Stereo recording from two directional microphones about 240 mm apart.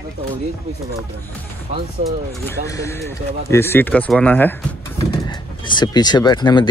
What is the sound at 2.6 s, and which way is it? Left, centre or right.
Speech, centre.